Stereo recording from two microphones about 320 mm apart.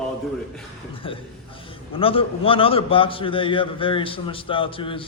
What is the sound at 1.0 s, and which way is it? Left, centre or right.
A man's voice, centre.